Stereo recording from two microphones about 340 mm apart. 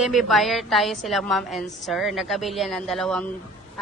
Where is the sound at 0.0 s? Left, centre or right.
Centre.